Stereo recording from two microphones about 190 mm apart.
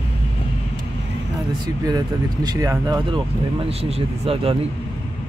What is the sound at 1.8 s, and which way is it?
Speech, 20° right (ahead or behind).